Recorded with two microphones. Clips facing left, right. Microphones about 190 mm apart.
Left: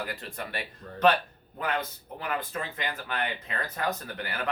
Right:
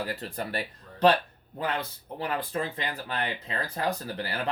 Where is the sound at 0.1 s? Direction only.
35° right (ahead or behind).